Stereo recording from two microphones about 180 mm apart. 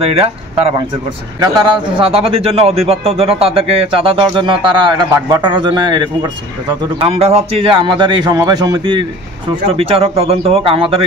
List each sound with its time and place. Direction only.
0.0 s a man's voice: 30° right (ahead or behind)
2.0 s a man's voice: 30° right (ahead or behind)